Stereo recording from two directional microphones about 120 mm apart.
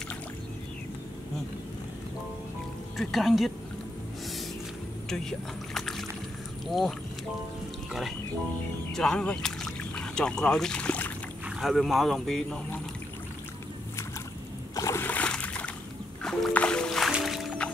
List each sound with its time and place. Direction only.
3.0 s speech: centre (ahead or behind)
5.8 s boat: centre (ahead or behind)
8.9 s speech: 5° left (ahead or behind)
11.4 s speech: centre (ahead or behind)
14.8 s splash: 25° left (ahead or behind)
15.0 s a sound: 10° left (ahead or behind)
16.2 s music: 5° left (ahead or behind)